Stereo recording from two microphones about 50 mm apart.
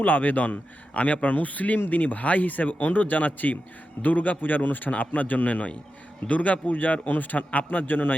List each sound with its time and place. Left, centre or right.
0.0 s speech: left